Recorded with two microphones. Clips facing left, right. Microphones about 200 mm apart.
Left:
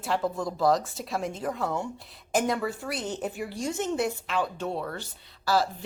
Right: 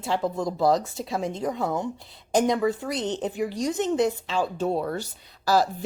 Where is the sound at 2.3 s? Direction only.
20° right (ahead or behind).